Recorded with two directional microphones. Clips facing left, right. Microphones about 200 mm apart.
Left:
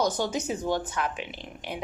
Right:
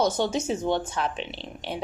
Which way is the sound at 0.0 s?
25° right (ahead or behind).